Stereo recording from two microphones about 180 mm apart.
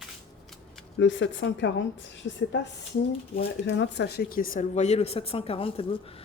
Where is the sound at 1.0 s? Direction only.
90° left.